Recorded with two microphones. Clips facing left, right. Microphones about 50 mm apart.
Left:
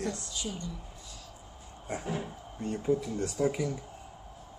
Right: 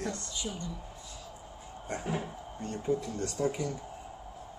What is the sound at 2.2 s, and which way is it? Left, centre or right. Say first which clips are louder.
Speech: left 1 dB; centre.